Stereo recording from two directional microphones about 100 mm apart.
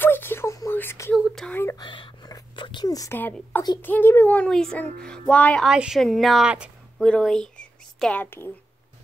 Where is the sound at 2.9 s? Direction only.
35° left (ahead or behind).